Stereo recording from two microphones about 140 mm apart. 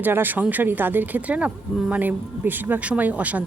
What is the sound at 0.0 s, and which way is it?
A woman's voice, 15° right (ahead or behind).